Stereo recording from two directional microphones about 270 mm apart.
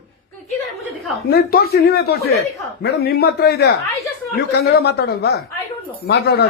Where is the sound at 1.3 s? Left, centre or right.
Left.